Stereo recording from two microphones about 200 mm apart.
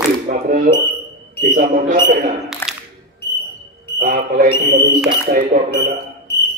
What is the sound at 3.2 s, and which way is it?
Smoke detector, 55° left (ahead or behind).